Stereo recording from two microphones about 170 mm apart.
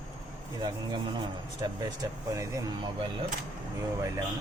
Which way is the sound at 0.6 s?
25° right (ahead or behind).